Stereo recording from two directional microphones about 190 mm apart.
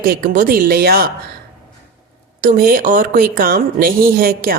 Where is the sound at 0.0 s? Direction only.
50° right (ahead or behind).